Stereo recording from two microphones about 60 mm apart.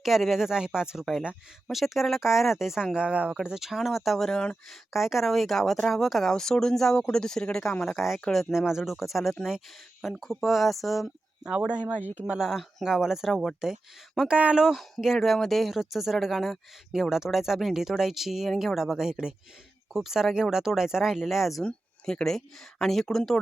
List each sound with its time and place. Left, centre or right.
0.0 s speech: centre
1.6 s speech: centre
4.3 s speech: centre
4.7 s speech: centre
11.7 s speech: right
12.2 s speech: centre
14.3 s speech: centre
14.8 s speech: centre
21.6 s speech: centre